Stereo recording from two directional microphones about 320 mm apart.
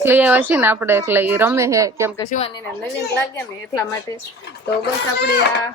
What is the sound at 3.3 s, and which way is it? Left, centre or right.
Speech, centre.